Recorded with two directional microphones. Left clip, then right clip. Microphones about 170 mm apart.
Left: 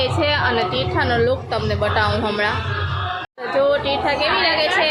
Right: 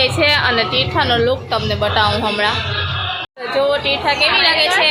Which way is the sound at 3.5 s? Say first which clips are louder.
Right 1 dB; 5° left (ahead or behind).